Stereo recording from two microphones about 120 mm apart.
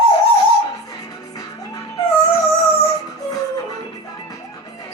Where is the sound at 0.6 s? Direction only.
30° left (ahead or behind).